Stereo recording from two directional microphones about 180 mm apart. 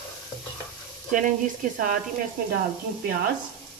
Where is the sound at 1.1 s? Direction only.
45° right (ahead or behind).